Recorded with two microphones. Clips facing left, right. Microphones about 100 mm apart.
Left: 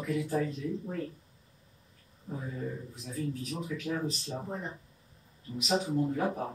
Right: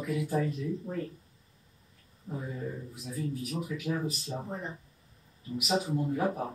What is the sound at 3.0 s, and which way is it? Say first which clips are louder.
A man's voice: right 1 dB; 5° right (ahead or behind).